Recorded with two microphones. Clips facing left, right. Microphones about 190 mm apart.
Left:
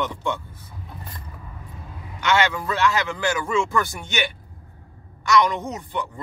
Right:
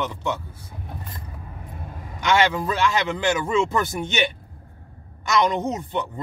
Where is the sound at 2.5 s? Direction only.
20° right (ahead or behind).